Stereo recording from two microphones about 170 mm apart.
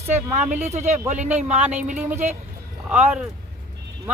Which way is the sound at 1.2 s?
10° right (ahead or behind).